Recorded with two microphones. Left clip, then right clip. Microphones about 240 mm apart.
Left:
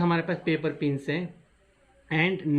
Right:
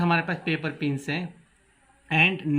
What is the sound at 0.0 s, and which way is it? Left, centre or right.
Speech, right.